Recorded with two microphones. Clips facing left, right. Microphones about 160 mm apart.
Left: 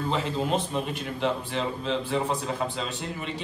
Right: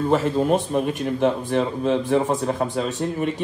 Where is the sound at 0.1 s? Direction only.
45° right (ahead or behind).